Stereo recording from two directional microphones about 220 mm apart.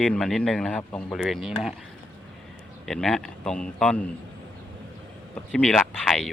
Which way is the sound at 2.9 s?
Centre (ahead or behind).